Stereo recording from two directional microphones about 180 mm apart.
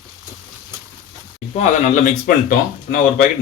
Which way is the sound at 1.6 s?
40° left (ahead or behind).